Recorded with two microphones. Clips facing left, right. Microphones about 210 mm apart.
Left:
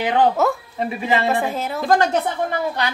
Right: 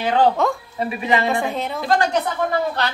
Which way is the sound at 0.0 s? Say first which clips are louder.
Even; 20° left (ahead or behind).